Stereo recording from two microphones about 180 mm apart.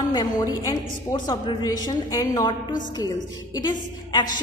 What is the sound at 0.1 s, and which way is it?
A woman's voice, 20° left (ahead or behind).